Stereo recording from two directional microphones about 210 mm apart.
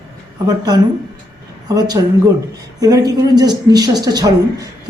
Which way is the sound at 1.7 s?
20° right (ahead or behind).